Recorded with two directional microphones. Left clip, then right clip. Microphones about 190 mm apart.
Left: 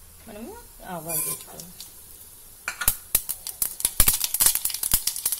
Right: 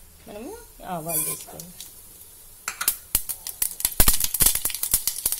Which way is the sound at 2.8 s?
5° left (ahead or behind).